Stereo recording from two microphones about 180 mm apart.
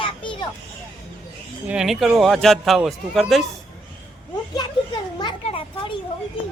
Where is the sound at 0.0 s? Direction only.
30° left (ahead or behind).